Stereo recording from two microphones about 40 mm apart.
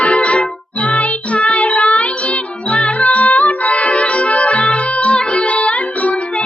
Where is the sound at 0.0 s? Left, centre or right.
Left.